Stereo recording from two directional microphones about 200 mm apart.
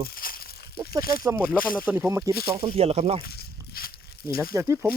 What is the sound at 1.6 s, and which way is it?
Speech, 45° left (ahead or behind).